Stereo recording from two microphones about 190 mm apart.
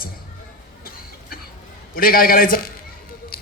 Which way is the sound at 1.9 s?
50° left (ahead or behind).